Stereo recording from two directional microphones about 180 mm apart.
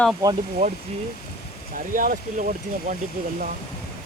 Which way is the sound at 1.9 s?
45° right (ahead or behind).